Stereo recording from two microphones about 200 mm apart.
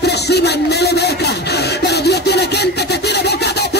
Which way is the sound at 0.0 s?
55° left (ahead or behind).